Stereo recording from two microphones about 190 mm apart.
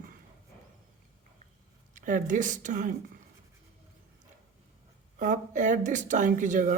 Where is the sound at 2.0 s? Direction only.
45° right (ahead or behind).